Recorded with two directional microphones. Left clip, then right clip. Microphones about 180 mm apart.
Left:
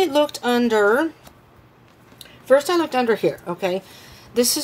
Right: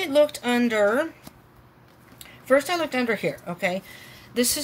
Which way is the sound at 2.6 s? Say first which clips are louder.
Left 5 dB; 45° left (ahead or behind).